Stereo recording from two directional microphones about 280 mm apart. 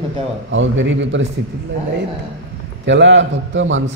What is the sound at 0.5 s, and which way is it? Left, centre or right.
Speech, right.